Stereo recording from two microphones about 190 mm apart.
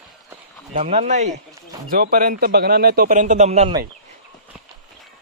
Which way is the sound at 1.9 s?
50° right (ahead or behind).